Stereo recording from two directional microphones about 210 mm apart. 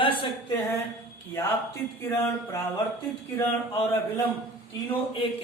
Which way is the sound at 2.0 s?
10° left (ahead or behind).